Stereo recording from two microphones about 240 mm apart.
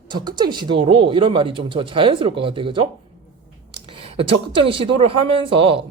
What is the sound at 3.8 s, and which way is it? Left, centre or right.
Speech, right.